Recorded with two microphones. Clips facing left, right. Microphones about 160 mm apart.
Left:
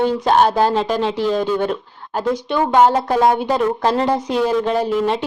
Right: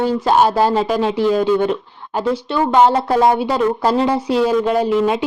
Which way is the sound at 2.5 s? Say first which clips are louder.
Right 1 dB; 10° left (ahead or behind).